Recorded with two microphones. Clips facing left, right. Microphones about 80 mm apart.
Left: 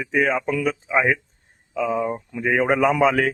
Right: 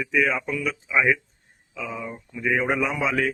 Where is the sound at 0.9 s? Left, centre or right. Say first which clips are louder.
Even; left.